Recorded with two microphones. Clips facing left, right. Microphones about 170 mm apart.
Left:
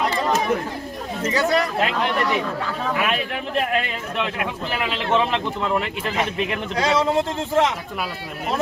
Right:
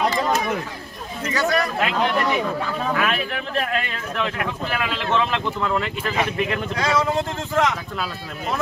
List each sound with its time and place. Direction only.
1.2 s speech: 25° left (ahead or behind)
3.0 s speech: 15° left (ahead or behind)